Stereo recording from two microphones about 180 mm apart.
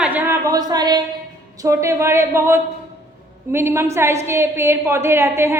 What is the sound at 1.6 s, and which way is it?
A woman's voice, 15° right (ahead or behind).